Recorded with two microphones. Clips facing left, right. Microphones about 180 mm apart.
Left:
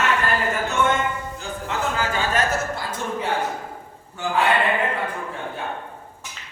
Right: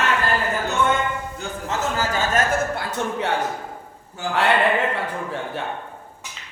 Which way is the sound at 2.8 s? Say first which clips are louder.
Right 2 dB; 65° right (ahead or behind).